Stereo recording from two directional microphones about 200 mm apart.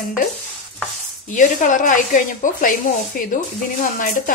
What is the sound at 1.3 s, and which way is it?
A woman's voice, 40° left (ahead or behind).